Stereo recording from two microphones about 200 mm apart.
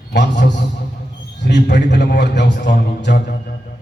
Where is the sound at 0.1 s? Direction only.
60° left (ahead or behind).